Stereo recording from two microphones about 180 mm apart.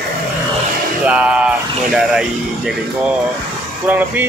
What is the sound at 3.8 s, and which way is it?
Speech, 10° right (ahead or behind).